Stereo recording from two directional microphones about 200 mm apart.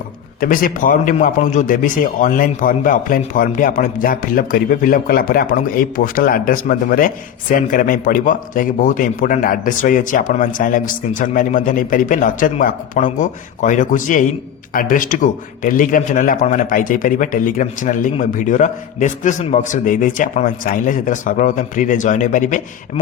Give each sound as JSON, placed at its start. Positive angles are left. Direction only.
{"t": 0.3, "sound": "a man's voice", "side_deg": 45}